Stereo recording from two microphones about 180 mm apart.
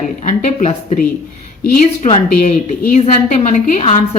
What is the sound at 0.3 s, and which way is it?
A woman's voice, 40° left (ahead or behind).